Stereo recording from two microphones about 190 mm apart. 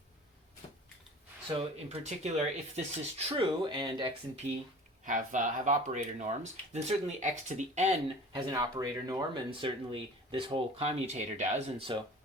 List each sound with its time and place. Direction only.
1.5 s speech: 35° right (ahead or behind)
5.0 s speech: 40° right (ahead or behind)
8.3 s speech: 20° right (ahead or behind)